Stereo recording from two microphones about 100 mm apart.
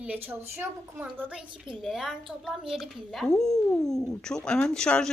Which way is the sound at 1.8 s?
5° right (ahead or behind).